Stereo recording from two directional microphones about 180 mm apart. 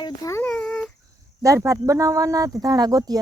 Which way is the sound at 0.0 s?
20° left (ahead or behind).